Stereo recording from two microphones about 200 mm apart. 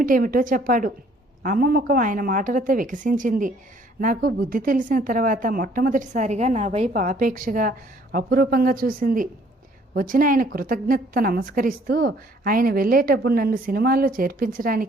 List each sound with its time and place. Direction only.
0.0 s a woman's voice: 45° right (ahead or behind)